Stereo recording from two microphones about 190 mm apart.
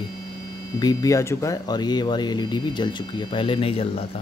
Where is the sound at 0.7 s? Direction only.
20° left (ahead or behind).